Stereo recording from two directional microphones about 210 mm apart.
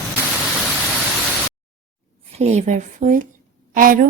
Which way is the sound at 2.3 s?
30° right (ahead or behind).